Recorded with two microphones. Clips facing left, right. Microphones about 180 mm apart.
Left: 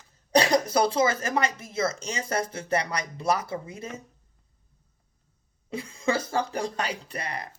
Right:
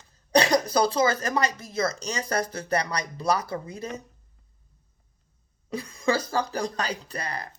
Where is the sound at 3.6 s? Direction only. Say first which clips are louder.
Right 3 dB; 35° right (ahead or behind).